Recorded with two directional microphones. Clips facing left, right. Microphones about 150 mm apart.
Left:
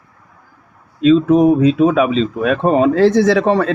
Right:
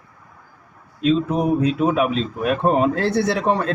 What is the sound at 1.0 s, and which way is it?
A man's voice, 90° left.